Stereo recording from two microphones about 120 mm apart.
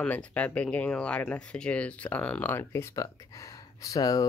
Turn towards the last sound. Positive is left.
turn(degrees=30)  # may be behind; listen again after turning